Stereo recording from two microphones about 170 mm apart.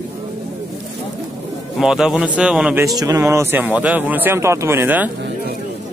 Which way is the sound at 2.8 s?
20° right (ahead or behind).